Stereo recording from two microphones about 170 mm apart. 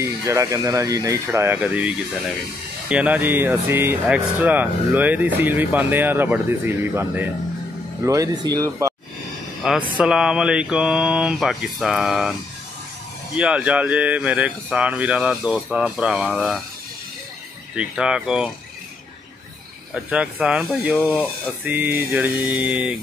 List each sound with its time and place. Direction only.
0.0 s speech: 15° right (ahead or behind)
9.6 s mantra: centre (ahead or behind)
13.4 s speech: 5° right (ahead or behind)
17.7 s mantra: 5° right (ahead or behind)
19.9 s mantra: 5° right (ahead or behind)
21.6 s speech: 10° right (ahead or behind)